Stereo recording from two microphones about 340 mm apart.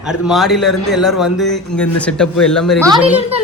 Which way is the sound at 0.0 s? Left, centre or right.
Centre.